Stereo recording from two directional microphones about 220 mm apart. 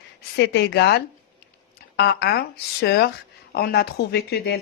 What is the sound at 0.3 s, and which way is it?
Speech, 50° left (ahead or behind).